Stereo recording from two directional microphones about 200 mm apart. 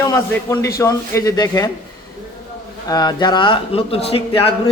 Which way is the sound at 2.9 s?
20° left (ahead or behind).